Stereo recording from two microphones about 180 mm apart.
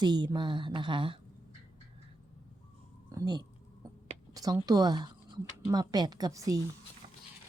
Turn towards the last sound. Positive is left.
turn(degrees=-20)  # may be behind; listen again after turning